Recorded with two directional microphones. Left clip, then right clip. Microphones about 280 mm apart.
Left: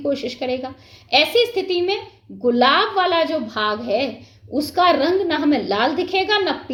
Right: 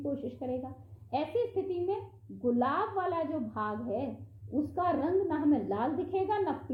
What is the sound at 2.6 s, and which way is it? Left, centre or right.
A woman's voice, centre.